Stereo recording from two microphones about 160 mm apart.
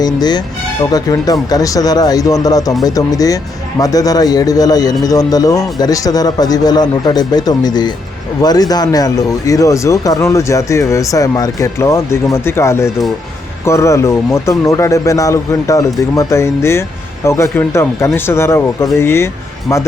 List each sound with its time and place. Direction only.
0.0 s speech: 25° left (ahead or behind)